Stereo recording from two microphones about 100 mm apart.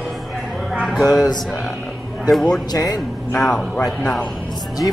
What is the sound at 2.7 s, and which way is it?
Speech, 40° left (ahead or behind).